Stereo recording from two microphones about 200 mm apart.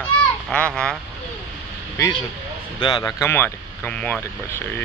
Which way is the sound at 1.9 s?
15° left (ahead or behind).